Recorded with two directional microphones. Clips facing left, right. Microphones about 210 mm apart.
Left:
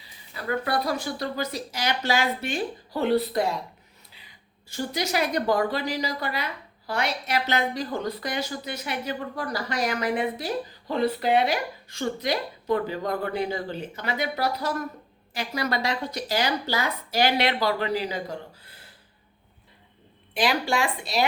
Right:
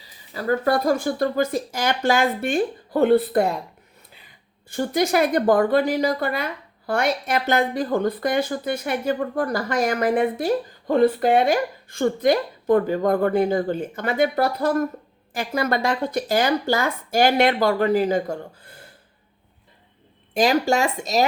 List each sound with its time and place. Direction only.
0.3 s a woman's voice: 40° right (ahead or behind)
4.7 s a woman's voice: 55° right (ahead or behind)
20.3 s a woman's voice: 45° right (ahead or behind)